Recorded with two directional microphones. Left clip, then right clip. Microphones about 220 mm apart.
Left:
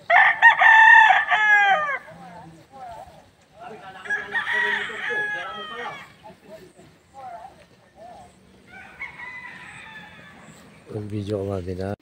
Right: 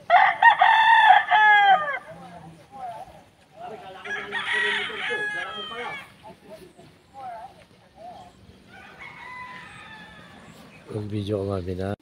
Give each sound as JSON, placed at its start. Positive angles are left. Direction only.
{"t": 0.0, "sound": "chicken", "side_deg": 35}
{"t": 4.0, "sound": "chicken", "side_deg": -45}
{"t": 11.1, "sound": "speech", "side_deg": 0}